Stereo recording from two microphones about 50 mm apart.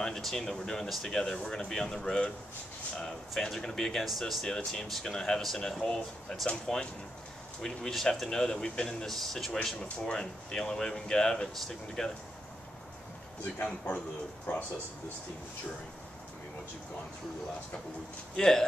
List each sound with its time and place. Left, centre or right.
0.0 s speech: centre
13.7 s speech: centre
14.5 s speech: left
18.3 s speech: centre